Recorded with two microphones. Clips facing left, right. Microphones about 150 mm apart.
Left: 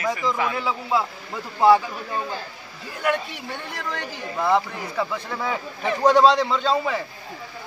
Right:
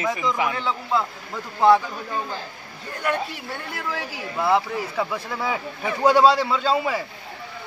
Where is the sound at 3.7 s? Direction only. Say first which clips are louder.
Right 2 dB; 5° right (ahead or behind).